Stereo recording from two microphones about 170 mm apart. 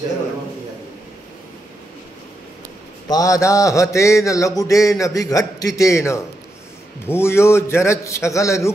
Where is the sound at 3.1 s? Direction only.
20° left (ahead or behind).